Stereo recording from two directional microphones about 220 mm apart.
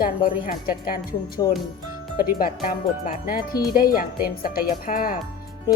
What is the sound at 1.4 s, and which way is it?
Speech, 20° left (ahead or behind).